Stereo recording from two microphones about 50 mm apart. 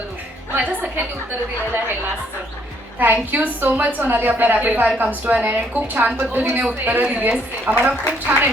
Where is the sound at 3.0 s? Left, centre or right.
Right.